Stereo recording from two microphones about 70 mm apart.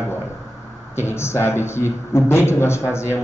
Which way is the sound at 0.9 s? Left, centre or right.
Left.